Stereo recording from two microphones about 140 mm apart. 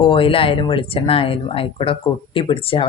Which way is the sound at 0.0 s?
40° left (ahead or behind).